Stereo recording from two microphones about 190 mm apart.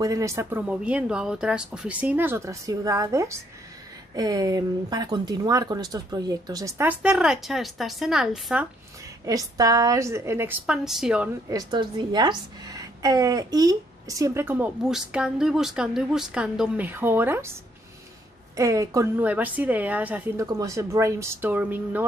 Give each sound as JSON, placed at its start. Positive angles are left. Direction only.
{"t": 0.0, "sound": "a woman's voice", "side_deg": -15}
{"t": 9.2, "sound": "a woman's voice", "side_deg": -20}
{"t": 11.4, "sound": "a woman's voice", "side_deg": -20}
{"t": 18.6, "sound": "a woman's voice", "side_deg": -15}